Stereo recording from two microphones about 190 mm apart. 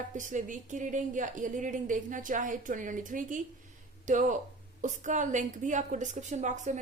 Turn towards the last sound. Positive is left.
turn(degrees=-40)  # may be behind; listen again after turning